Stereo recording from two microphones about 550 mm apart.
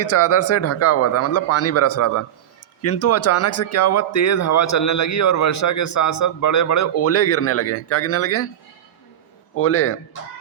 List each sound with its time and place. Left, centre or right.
0.0 s speech: left
9.6 s speech: left